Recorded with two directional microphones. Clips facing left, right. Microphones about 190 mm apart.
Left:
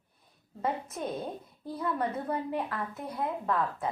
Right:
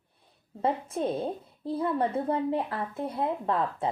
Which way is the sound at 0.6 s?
30° right (ahead or behind).